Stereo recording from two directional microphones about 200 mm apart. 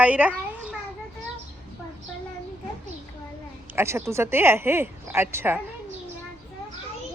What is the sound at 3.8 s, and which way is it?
Speech, 15° right (ahead or behind).